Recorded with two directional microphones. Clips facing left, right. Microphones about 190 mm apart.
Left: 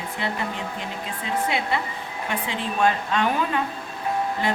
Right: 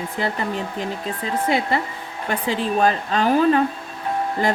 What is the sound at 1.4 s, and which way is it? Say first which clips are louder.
Speech: right 7 dB; 40° right (ahead or behind).